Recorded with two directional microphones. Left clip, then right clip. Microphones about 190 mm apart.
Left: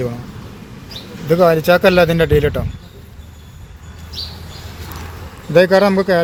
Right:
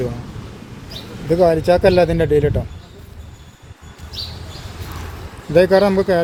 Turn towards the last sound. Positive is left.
turn(degrees=0)  # may be behind; listen again after turning